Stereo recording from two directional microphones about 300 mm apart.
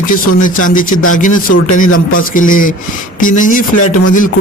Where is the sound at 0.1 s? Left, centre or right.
Left.